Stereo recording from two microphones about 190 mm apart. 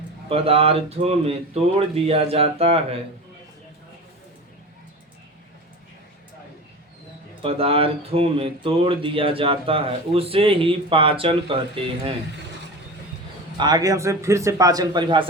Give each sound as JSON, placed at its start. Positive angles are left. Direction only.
{"t": 0.3, "sound": "speech", "side_deg": -30}
{"t": 7.4, "sound": "speech", "side_deg": -30}
{"t": 13.6, "sound": "speech", "side_deg": -20}